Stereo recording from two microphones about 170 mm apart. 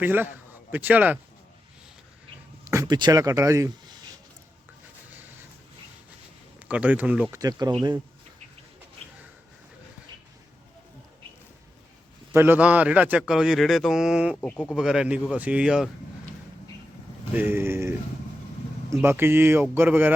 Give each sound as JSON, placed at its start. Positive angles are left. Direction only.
{"t": 0.0, "sound": "speech", "side_deg": -10}
{"t": 2.6, "sound": "speech", "side_deg": -20}
{"t": 6.7, "sound": "speech", "side_deg": -10}
{"t": 7.4, "sound": "speech", "side_deg": -25}
{"t": 12.3, "sound": "speech", "side_deg": -10}
{"t": 14.4, "sound": "speech", "side_deg": 10}
{"t": 14.8, "sound": "speech", "side_deg": -5}
{"t": 17.3, "sound": "speech", "side_deg": -10}